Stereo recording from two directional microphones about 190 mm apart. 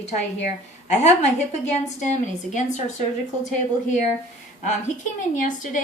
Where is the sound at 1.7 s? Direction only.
40° left (ahead or behind).